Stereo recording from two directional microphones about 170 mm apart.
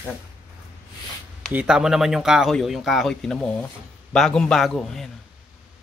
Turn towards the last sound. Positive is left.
turn(degrees=0)  # may be behind; listen again after turning